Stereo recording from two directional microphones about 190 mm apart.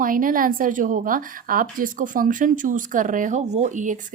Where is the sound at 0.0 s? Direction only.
45° right (ahead or behind).